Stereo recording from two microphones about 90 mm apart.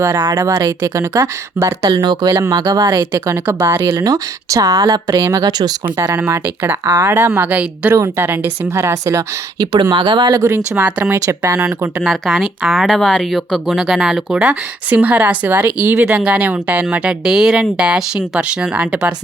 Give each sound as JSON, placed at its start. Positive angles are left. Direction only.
{"t": 0.3, "sound": "speech", "side_deg": -35}
{"t": 1.8, "sound": "speech", "side_deg": -55}
{"t": 3.1, "sound": "speech", "side_deg": -25}
{"t": 3.8, "sound": "speech", "side_deg": -45}
{"t": 6.1, "sound": "speech", "side_deg": -25}
{"t": 7.9, "sound": "speech", "side_deg": -30}
{"t": 9.9, "sound": "speech", "side_deg": -60}
{"t": 10.8, "sound": "speech", "side_deg": -15}
{"t": 11.3, "sound": "speech", "side_deg": -30}
{"t": 12.0, "sound": "speech", "side_deg": 0}